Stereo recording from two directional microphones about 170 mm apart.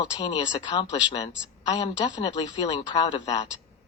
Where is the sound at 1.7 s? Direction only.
25° left (ahead or behind).